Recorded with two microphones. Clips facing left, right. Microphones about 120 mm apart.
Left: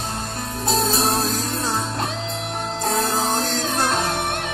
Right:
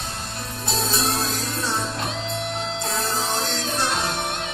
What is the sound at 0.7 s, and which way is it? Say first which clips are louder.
Music: left 5 dB; 40° left (ahead or behind).